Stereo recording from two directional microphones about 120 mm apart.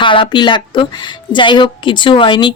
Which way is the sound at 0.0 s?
45° left (ahead or behind).